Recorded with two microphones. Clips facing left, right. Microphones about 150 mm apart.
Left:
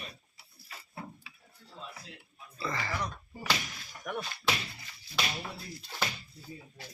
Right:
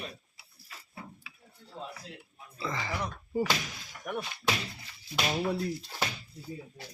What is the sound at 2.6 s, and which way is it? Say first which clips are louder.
Speech: right 1 dB; 15° right (ahead or behind).